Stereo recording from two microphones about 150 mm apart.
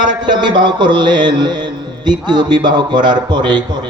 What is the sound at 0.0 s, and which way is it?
Mantra, 30° right (ahead or behind).